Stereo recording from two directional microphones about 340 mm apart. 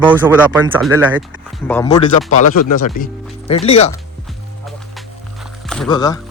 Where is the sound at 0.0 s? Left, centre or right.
Centre.